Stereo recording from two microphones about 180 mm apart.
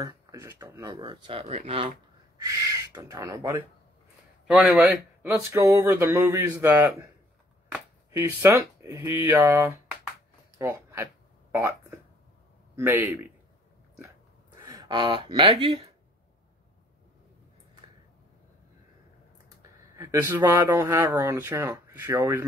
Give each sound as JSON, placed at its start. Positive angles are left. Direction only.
{"t": 0.0, "sound": "speech", "side_deg": -15}
{"t": 2.3, "sound": "speech", "side_deg": -20}
{"t": 4.5, "sound": "speech", "side_deg": -5}
{"t": 14.6, "sound": "speech", "side_deg": -20}
{"t": 20.0, "sound": "speech", "side_deg": -15}